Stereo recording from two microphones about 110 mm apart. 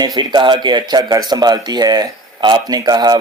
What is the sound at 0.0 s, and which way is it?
Speech, 40° right (ahead or behind).